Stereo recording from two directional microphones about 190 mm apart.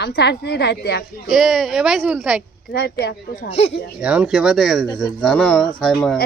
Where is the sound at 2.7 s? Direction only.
60° left (ahead or behind).